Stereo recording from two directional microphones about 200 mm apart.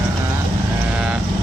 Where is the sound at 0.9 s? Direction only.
5° right (ahead or behind).